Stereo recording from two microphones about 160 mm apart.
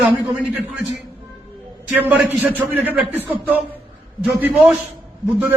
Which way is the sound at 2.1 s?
10° right (ahead or behind).